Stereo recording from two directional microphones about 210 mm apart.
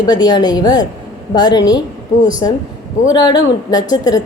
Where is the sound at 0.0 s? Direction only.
20° left (ahead or behind).